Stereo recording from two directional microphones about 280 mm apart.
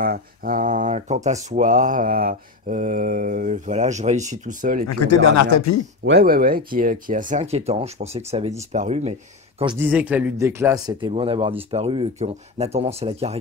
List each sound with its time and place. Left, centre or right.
0.0 s speech: right
4.8 s a man's voice: left
6.0 s speech: right
9.8 s speech: centre; by 13.4 s right